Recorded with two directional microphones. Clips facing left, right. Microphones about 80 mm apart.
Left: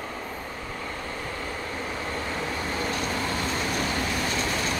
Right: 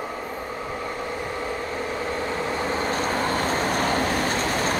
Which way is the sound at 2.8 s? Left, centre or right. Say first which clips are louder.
Right 3 dB; right.